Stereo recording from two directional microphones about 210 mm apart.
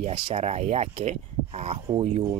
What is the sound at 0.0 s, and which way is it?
Speech, 30° right (ahead or behind).